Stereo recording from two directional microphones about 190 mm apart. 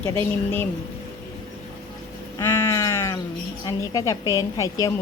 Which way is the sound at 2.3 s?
15° left (ahead or behind).